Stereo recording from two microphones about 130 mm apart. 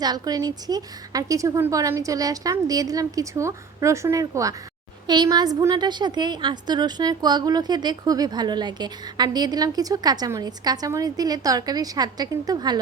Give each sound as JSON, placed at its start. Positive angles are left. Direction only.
{"t": 0.0, "sound": "a woman's voice", "side_deg": -30}